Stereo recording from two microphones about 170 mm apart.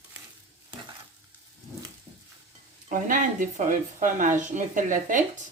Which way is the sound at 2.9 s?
50° right (ahead or behind).